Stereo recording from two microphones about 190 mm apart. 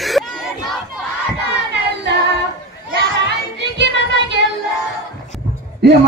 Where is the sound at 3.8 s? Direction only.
65° right (ahead or behind).